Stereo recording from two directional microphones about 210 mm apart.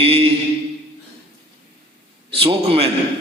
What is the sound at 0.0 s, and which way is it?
Speech, 30° right (ahead or behind).